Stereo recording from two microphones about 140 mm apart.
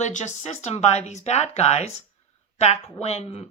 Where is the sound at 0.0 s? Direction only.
60° left (ahead or behind).